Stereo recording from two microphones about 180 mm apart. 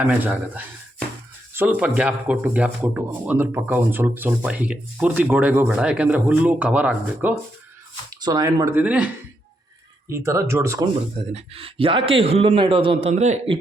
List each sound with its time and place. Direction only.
0.0 s a man's voice: 5° right (ahead or behind)
8.2 s speech: 20° right (ahead or behind)
8.8 s a man's voice: 5° right (ahead or behind)
10.1 s a man's voice: 15° right (ahead or behind)
11.3 s a man's voice: 35° right (ahead or behind)